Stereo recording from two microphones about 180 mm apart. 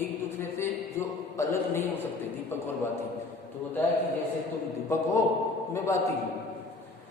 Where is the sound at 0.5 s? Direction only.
15° left (ahead or behind).